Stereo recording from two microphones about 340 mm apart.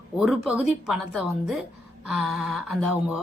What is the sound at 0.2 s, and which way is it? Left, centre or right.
Speech, centre.